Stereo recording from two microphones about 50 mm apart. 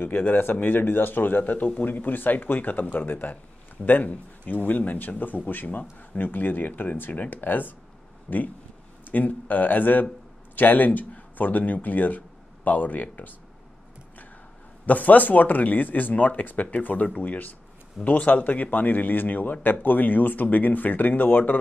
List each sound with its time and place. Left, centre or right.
0.0 s speech: left
8.3 s speech: centre
9.0 s speech: left
14.9 s speech: left